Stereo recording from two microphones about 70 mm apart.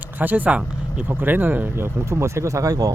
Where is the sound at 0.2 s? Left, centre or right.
Right.